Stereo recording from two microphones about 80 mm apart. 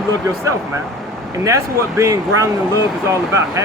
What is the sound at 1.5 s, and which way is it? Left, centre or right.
Speech, right.